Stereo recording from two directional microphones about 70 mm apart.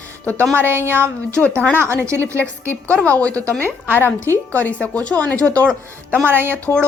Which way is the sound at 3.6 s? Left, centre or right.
Left.